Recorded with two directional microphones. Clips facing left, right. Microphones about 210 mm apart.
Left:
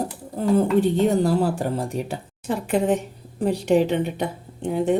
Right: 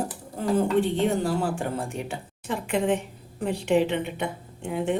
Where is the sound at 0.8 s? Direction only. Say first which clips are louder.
Left 5 dB; 40° left (ahead or behind).